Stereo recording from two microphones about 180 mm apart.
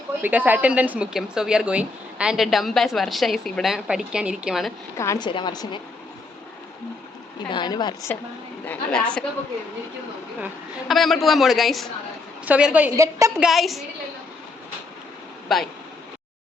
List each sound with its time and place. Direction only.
0.2 s a woman's voice: 10° right (ahead or behind)
4.9 s a woman's voice: 20° left (ahead or behind)
7.4 s a woman's voice: 25° left (ahead or behind)
8.6 s a woman's voice: 5° left (ahead or behind)
10.4 s a woman's voice: centre (ahead or behind); by 13.3 s 15° right (ahead or behind)
13.4 s a woman's voice: centre (ahead or behind)
15.5 s a woman's voice: centre (ahead or behind)